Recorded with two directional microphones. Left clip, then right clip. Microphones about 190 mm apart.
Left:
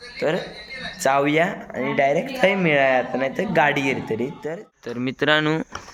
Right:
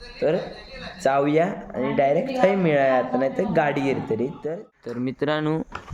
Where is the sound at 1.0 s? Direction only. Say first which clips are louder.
Left 1 dB; 5° right (ahead or behind).